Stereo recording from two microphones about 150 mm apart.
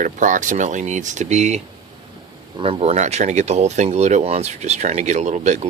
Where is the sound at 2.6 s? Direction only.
40° right (ahead or behind).